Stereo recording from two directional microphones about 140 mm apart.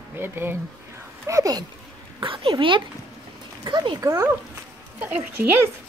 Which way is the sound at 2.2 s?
40° right (ahead or behind).